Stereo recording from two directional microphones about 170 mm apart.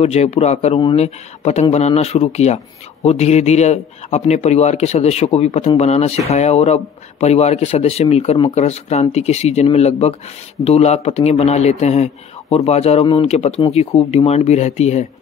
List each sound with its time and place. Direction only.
0.0 s a man's voice: 40° left (ahead or behind)